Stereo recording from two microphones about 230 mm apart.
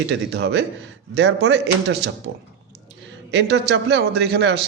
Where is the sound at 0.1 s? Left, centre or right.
Right.